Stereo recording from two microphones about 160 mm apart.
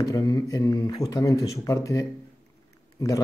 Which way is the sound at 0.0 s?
20° left (ahead or behind).